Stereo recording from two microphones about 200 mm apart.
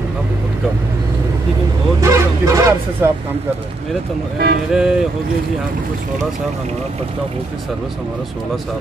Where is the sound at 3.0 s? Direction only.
15° right (ahead or behind).